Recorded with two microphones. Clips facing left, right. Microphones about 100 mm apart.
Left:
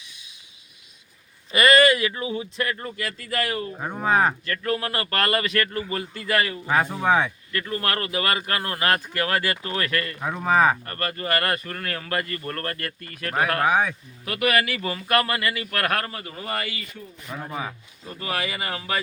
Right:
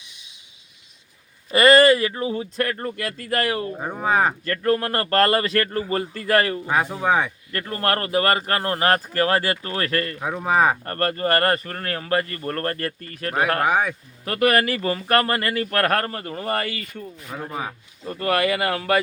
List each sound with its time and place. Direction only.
1.5 s speech: 35° right (ahead or behind)
3.8 s speech: 10° right (ahead or behind)
4.4 s speech: 45° right (ahead or behind)
6.7 s speech: 5° right (ahead or behind)
7.5 s speech: 40° right (ahead or behind)
10.2 s speech: 10° right (ahead or behind)
10.8 s speech: 40° right (ahead or behind)
13.7 s speech: 10° right (ahead or behind)
14.3 s speech: 40° right (ahead or behind)
17.5 s speech: 10° right (ahead or behind)
18.1 s speech: 55° right (ahead or behind)